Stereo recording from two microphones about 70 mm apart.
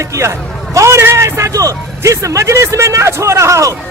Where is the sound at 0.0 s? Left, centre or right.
Right.